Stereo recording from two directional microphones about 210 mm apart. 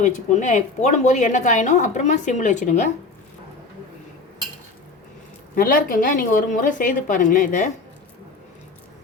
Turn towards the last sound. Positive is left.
turn(degrees=40)  # may be behind; listen again after turning